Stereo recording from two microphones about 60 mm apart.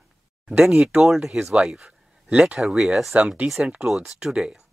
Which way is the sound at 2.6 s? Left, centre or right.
Centre.